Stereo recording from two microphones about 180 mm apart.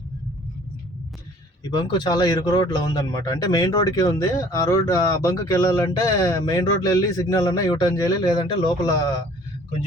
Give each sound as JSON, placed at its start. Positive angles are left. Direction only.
{"t": 1.7, "sound": "a man's voice", "side_deg": 25}